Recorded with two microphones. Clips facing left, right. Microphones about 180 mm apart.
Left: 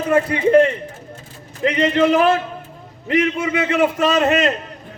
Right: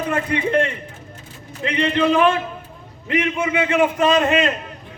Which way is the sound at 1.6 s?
40° left (ahead or behind).